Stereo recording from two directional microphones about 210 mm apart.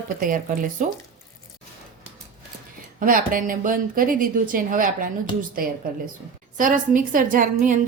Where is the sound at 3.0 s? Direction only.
40° right (ahead or behind).